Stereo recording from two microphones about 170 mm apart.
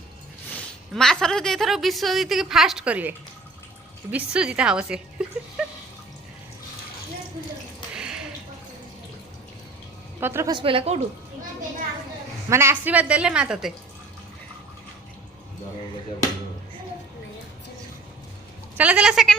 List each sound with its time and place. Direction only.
0.5 s a woman's voice: 5° left (ahead or behind)
5.6 s water: 5° right (ahead or behind)
7.9 s a sound: 5° right (ahead or behind)
10.2 s a woman's voice: 15° right (ahead or behind)
10.5 s a woman's voice: 30° right (ahead or behind)
12.5 s a woman's voice: 15° right (ahead or behind)
18.8 s a woman's voice: 10° right (ahead or behind)